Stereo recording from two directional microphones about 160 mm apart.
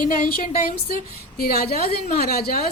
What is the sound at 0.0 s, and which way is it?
A woman's voice, 65° left (ahead or behind).